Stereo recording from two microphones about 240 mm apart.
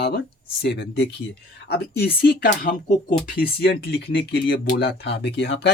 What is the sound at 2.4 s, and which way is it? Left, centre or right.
Speech, left.